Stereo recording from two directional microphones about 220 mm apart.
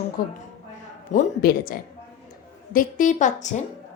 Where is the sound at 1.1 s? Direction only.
40° left (ahead or behind).